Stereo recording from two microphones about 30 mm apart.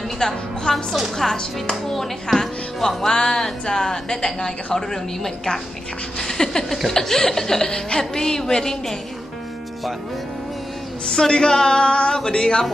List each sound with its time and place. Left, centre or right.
0.2 s speech: left
1.2 s speech: centre
3.1 s speech: left
11.1 s speech: left